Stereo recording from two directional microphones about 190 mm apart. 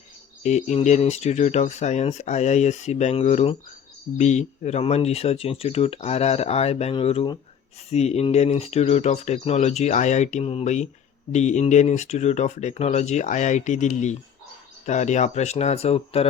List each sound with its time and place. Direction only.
0.4 s speech: 35° left (ahead or behind)